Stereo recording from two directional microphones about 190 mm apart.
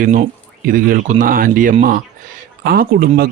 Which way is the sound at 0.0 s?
45° right (ahead or behind).